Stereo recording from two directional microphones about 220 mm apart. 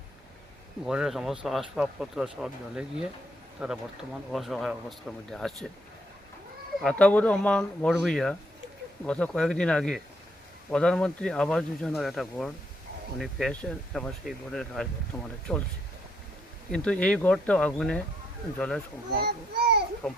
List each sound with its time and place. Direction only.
0.9 s speech: centre (ahead or behind)
6.7 s speech: 5° left (ahead or behind)
16.7 s speech: 5° left (ahead or behind)
19.2 s a child's voice: 50° right (ahead or behind)
20.0 s speech: 5° left (ahead or behind)